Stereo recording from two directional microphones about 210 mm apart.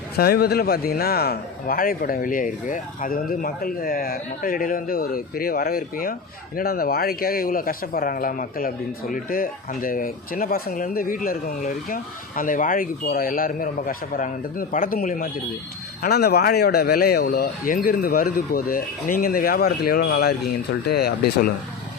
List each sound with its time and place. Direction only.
0.2 s a man's voice: 50° left (ahead or behind)